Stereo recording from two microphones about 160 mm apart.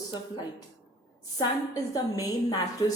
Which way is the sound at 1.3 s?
20° left (ahead or behind).